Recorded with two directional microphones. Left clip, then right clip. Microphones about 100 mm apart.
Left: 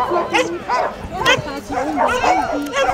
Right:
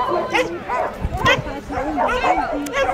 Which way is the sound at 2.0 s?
20° left (ahead or behind).